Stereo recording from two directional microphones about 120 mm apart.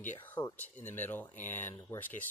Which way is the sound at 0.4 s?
15° left (ahead or behind).